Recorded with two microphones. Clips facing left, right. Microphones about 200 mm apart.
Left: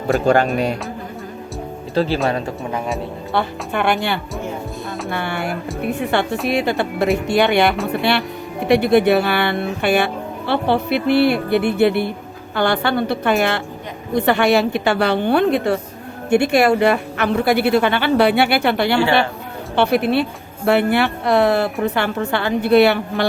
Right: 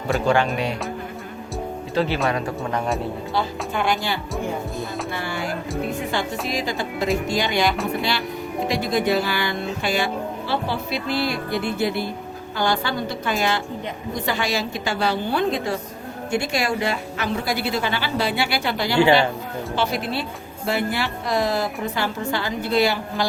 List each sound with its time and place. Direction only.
0.5 s speech: 45° left (ahead or behind)
2.0 s speech: 35° left (ahead or behind)
2.7 s speech: centre (ahead or behind)
3.3 s speech: 65° left (ahead or behind)